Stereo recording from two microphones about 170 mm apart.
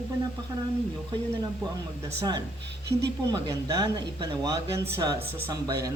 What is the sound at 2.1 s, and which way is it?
Speech, 20° right (ahead or behind).